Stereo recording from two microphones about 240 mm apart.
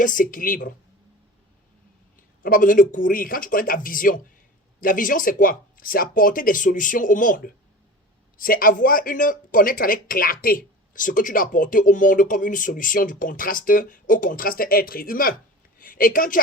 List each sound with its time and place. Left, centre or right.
0.0 s speech: left
2.4 s a woman's voice: left